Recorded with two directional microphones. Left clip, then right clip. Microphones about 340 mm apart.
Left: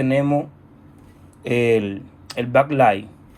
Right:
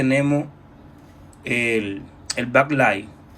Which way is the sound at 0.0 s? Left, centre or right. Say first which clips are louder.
Left 1 dB; centre.